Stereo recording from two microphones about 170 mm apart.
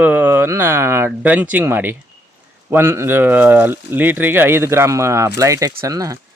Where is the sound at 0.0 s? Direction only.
10° right (ahead or behind).